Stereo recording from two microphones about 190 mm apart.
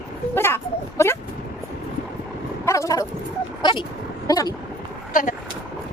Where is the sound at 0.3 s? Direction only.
10° left (ahead or behind).